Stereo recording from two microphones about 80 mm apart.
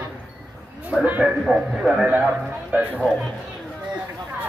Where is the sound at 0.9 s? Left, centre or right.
Centre.